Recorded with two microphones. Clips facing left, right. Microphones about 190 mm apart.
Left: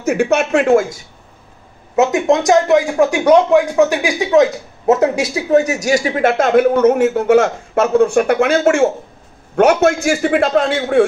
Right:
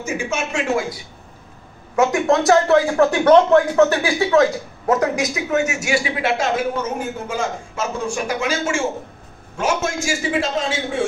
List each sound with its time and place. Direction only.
0.0 s a man's voice: 65° left (ahead or behind)
2.0 s a man's voice: 20° left (ahead or behind); by 11.1 s 60° left (ahead or behind)